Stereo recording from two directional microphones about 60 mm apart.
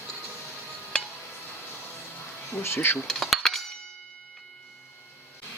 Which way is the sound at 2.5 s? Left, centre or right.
Left.